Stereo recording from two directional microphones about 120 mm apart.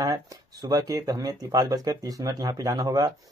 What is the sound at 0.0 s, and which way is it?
Speech, 30° right (ahead or behind).